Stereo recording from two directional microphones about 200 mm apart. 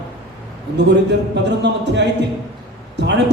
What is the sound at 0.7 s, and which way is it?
A man's voice, 60° right (ahead or behind).